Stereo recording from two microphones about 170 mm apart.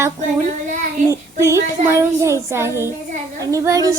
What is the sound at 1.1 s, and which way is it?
Speech, 15° right (ahead or behind).